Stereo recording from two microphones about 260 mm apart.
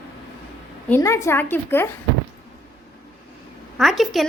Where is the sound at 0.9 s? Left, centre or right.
Centre.